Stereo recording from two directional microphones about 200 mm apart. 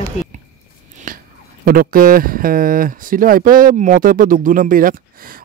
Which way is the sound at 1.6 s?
45° right (ahead or behind).